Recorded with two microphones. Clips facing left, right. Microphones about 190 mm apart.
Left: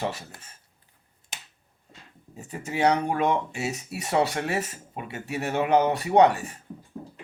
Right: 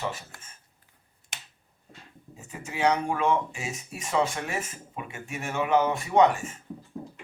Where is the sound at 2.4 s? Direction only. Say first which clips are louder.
Left 3 dB; 40° left (ahead or behind).